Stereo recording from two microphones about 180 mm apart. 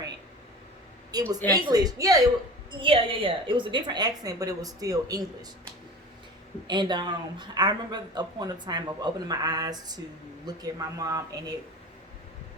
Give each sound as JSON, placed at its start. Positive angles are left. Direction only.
{"t": 1.1, "sound": "a woman's voice", "side_deg": -20}
{"t": 2.8, "sound": "speech", "side_deg": -30}
{"t": 6.7, "sound": "speech", "side_deg": -25}